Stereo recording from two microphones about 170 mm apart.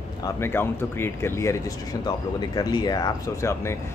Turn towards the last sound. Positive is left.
turn(degrees=20)  # may be behind; listen again after turning